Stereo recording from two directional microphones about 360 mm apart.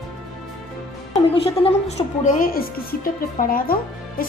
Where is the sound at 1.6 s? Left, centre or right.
Centre.